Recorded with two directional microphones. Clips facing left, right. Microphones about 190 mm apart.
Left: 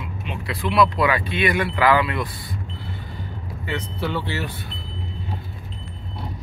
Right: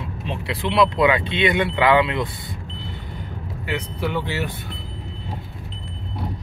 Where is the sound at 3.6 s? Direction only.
10° right (ahead or behind).